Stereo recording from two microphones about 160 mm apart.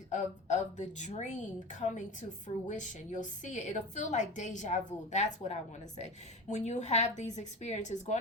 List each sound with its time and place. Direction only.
0.1 s a woman's voice: 50° left (ahead or behind)